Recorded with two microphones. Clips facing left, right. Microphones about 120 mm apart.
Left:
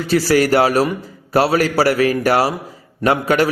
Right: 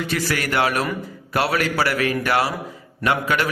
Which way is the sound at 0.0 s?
35° left (ahead or behind).